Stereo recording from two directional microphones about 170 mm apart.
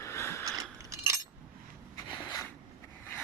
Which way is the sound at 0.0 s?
15° left (ahead or behind).